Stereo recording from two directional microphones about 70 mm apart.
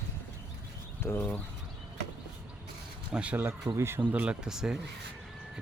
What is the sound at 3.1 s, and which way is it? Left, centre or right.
Speech, right.